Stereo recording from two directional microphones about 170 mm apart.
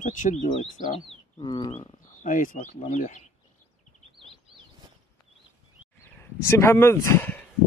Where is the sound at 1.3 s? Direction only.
25° left (ahead or behind).